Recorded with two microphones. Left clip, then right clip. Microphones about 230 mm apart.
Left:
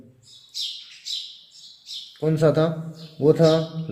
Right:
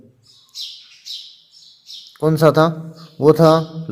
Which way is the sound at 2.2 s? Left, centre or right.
Right.